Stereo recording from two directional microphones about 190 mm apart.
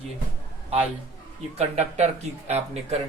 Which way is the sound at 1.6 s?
35° right (ahead or behind).